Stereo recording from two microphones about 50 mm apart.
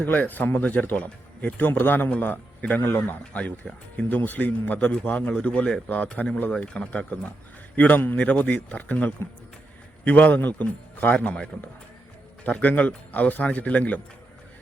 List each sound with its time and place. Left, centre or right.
0.0 s a man's voice: left
7.8 s a man's voice: left